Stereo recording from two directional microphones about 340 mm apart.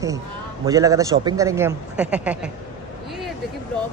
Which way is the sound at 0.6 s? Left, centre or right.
Centre.